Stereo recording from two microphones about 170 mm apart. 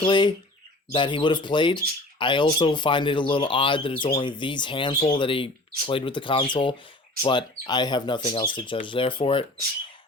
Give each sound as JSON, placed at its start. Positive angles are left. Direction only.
{"t": 0.0, "sound": "speech", "side_deg": 25}